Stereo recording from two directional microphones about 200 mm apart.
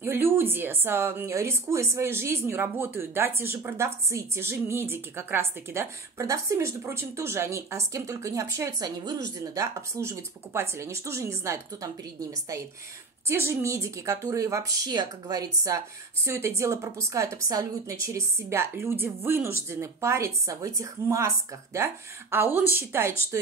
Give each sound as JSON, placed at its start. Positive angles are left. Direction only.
{"t": 0.0, "sound": "a woman's voice", "side_deg": -10}